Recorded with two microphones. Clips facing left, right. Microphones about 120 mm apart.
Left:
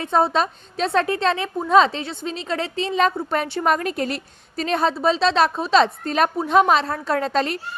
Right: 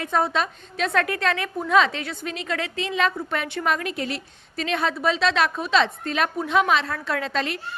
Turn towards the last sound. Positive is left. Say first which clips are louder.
# left 5 dB
turn(degrees=40)  # may be behind; listen again after turning